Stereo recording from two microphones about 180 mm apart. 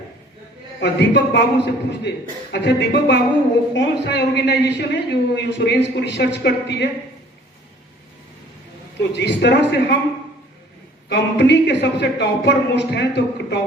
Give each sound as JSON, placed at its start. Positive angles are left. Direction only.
{"t": 0.8, "sound": "a man's voice", "side_deg": 75}
{"t": 9.0, "sound": "a man's voice", "side_deg": 75}
{"t": 11.1, "sound": "a man's voice", "side_deg": 75}